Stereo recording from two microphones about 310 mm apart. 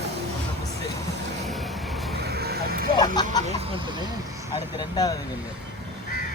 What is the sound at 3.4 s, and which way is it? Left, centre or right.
Speech, centre.